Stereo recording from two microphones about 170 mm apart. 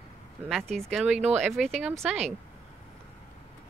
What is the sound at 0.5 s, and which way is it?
Speech, 5° left (ahead or behind).